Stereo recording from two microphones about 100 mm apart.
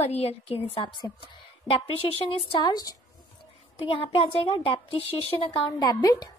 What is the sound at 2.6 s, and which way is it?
Speech, 40° left (ahead or behind).